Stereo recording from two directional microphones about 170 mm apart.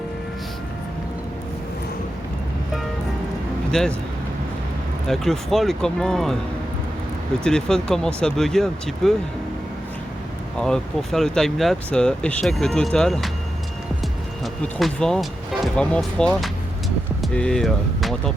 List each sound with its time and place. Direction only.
3.7 s speech: 5° left (ahead or behind)
5.0 s speech: centre (ahead or behind)
7.4 s speech: 5° left (ahead or behind)
10.6 s speech: 5° left (ahead or behind)
14.4 s speech: centre (ahead or behind)